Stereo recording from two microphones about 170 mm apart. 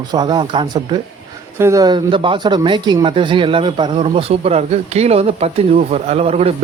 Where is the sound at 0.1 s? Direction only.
25° right (ahead or behind).